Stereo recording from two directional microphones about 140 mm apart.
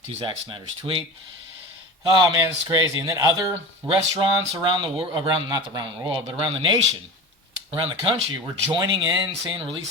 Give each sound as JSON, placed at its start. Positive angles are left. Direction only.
{"t": 0.2, "sound": "speech", "side_deg": -35}
{"t": 2.0, "sound": "a man's voice", "side_deg": -30}